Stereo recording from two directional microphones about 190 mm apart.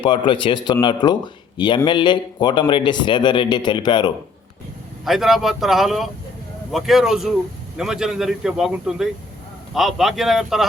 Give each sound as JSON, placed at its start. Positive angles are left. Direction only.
{"t": 0.0, "sound": "speech", "side_deg": 25}
{"t": 5.0, "sound": "speech", "side_deg": 0}